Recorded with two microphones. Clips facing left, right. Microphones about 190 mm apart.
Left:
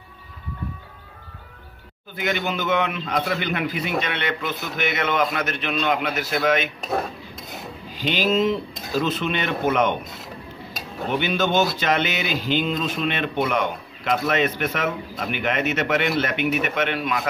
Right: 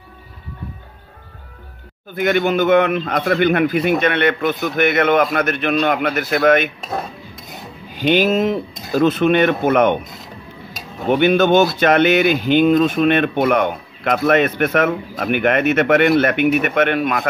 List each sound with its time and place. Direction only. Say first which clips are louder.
2.1 s speech: right 9 dB; 55° right (ahead or behind)
6.8 s dishes: even; centre (ahead or behind)
7.9 s speech: right 7 dB; 55° right (ahead or behind)
11.1 s speech: right 9 dB; 55° right (ahead or behind)